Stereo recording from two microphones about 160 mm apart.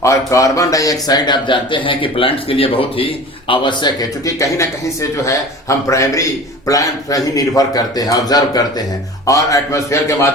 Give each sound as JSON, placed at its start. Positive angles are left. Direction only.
{"t": 0.0, "sound": "a man's voice", "side_deg": 20}